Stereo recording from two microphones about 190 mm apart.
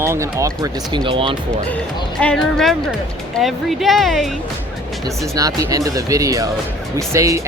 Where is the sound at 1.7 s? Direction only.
5° left (ahead or behind).